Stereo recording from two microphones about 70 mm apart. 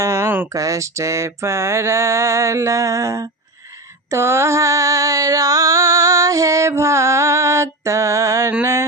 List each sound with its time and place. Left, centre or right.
0.0 s a sound: right
0.5 s music: right
4.1 s music: right